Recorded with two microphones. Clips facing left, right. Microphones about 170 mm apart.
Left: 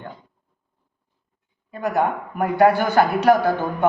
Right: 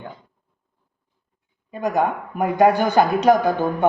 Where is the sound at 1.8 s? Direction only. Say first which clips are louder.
Right 1 dB; 15° right (ahead or behind).